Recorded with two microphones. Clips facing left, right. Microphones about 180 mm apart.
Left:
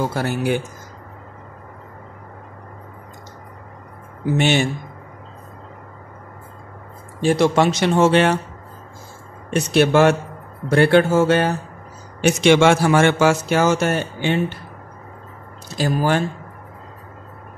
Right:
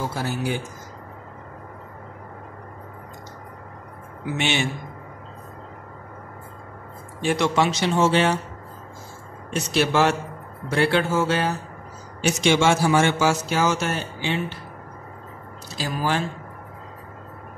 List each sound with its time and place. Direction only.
0.0 s a man's voice: 60° left (ahead or behind)
4.4 s speech: 45° left (ahead or behind)
7.2 s speech: 35° left (ahead or behind)
7.5 s a man's voice: 55° left (ahead or behind)
9.5 s a man's voice: 55° left (ahead or behind)
15.8 s speech: 50° left (ahead or behind)